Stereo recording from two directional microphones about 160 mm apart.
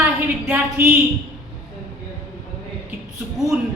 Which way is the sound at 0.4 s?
15° right (ahead or behind).